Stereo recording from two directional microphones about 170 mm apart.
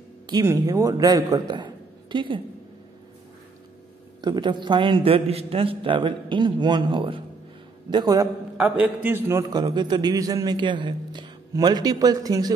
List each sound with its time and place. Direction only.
0.3 s a man's voice: 20° right (ahead or behind)
4.2 s a man's voice: 25° right (ahead or behind)
8.5 s a man's voice: 10° right (ahead or behind)